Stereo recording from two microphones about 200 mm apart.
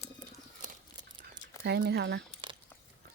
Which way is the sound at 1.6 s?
55° right (ahead or behind).